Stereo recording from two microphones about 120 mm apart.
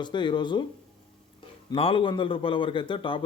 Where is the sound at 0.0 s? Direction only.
40° left (ahead or behind).